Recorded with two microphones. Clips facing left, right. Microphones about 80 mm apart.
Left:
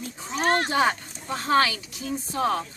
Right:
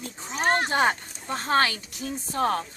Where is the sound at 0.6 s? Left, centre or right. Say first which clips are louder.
Even; right.